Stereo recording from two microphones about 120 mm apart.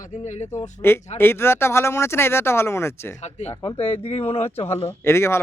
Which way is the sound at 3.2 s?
70° left (ahead or behind).